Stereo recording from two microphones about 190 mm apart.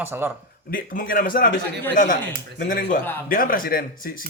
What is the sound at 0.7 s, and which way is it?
A man's voice, 45° left (ahead or behind).